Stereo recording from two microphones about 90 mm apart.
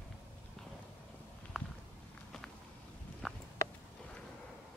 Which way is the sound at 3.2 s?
Centre (ahead or behind).